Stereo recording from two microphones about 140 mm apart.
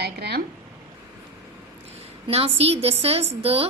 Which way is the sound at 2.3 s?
45° right (ahead or behind).